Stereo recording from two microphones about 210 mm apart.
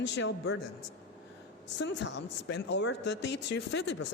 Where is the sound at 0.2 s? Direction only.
55° left (ahead or behind).